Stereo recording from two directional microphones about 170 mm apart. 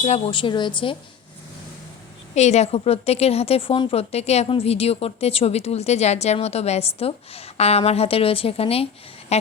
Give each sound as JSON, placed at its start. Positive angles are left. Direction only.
{"t": 0.0, "sound": "a woman's voice", "side_deg": 35}
{"t": 2.3, "sound": "a woman's voice", "side_deg": 40}